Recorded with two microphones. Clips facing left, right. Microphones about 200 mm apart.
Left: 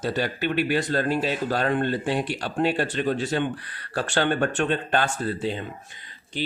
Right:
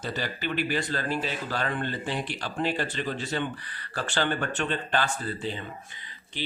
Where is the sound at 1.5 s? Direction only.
45° left (ahead or behind).